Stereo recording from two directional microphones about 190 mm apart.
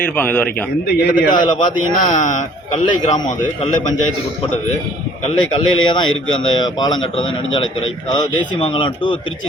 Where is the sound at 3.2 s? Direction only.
25° left (ahead or behind).